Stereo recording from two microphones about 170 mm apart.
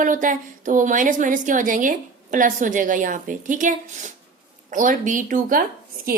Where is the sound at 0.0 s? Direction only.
50° right (ahead or behind).